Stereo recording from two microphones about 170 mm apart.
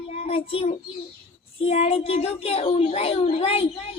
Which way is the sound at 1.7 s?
35° left (ahead or behind).